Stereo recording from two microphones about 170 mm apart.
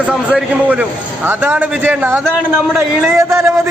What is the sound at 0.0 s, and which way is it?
A man's voice, 5° right (ahead or behind).